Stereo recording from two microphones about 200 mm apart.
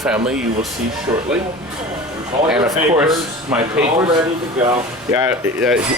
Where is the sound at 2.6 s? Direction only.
15° right (ahead or behind).